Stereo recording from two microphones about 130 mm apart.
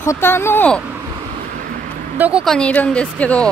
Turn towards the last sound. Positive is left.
turn(degrees=10)  # may be behind; listen again after turning